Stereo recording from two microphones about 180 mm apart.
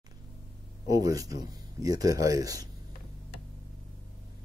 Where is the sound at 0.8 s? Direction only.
20° right (ahead or behind).